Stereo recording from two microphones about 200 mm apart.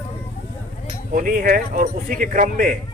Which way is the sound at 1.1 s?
45° right (ahead or behind).